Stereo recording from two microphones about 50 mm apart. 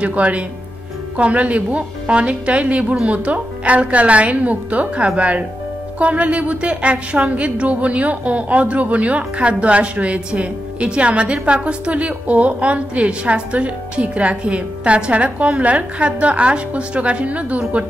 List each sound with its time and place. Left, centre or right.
0.0 s a woman's voice: right